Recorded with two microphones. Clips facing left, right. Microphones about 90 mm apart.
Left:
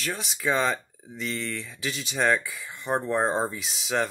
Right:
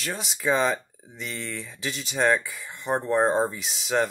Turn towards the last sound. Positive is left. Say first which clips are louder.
# right 2 dB
turn(degrees=0)  # may be behind; listen again after turning